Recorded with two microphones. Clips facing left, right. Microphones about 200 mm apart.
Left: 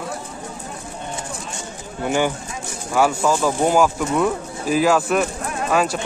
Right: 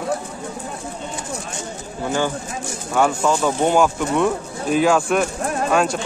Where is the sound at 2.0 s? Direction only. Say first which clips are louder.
Left 2 dB; 15° left (ahead or behind).